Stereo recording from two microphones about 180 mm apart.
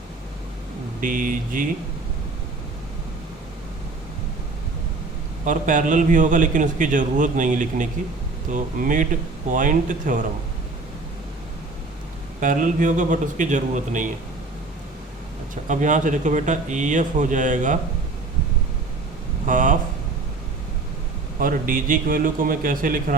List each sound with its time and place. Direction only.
1.0 s a man's voice: 45° right (ahead or behind)
5.5 s a man's voice: 45° right (ahead or behind)
12.4 s a man's voice: 45° right (ahead or behind)
15.6 s a man's voice: 45° right (ahead or behind)
19.5 s speech: 45° right (ahead or behind)
21.4 s a man's voice: 50° right (ahead or behind)